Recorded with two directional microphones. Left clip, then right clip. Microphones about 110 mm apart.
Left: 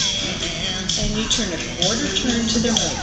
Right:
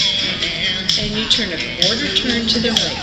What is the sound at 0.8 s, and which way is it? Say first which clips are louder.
Speech: right 5 dB; 20° right (ahead or behind).